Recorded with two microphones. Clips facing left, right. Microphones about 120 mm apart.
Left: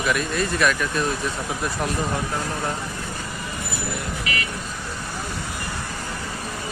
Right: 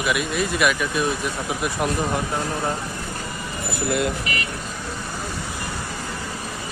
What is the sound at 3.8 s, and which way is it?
Speech, 75° right (ahead or behind).